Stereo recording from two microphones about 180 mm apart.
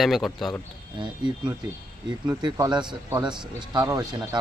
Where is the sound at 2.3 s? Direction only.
20° right (ahead or behind).